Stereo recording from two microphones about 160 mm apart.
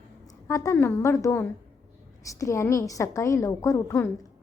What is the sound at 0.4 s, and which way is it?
A woman's voice, 20° left (ahead or behind).